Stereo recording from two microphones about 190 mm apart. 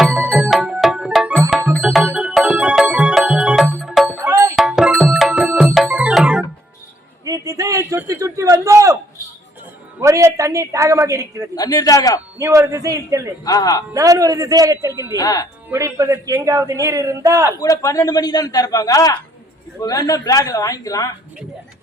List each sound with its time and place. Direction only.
0.0 s music: 5° right (ahead or behind)
4.5 s music: centre (ahead or behind)
7.3 s a sound: 15° right (ahead or behind)
10.0 s a woman's voice: 15° right (ahead or behind)
11.5 s a man's voice: 20° left (ahead or behind)
12.4 s a man's voice: 15° right (ahead or behind)
13.4 s a man's voice: 20° left (ahead or behind)
13.9 s a man's voice: 20° right (ahead or behind)
15.1 s a man's voice: 20° left (ahead or behind)
15.7 s a man's voice: 15° right (ahead or behind)
17.6 s a man's voice: 20° left (ahead or behind)